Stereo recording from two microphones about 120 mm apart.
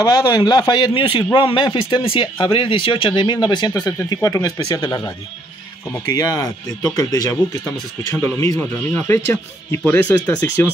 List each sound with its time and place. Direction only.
0.0 s a man's voice: 35° left (ahead or behind); by 10.7 s 15° left (ahead or behind)